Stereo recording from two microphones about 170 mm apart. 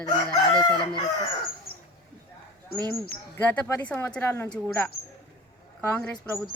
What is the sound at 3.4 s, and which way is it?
Speech, 10° left (ahead or behind).